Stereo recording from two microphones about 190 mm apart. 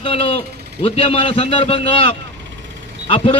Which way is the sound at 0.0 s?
30° left (ahead or behind).